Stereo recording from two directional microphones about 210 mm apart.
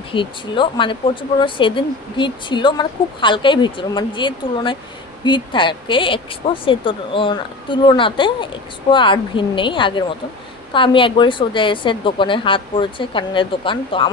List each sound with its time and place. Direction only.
0.1 s speech: 25° left (ahead or behind)